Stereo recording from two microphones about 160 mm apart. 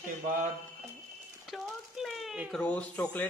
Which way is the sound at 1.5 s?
Centre (ahead or behind).